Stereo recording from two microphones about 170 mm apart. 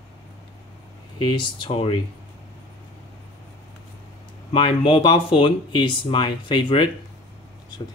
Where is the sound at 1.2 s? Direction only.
30° left (ahead or behind).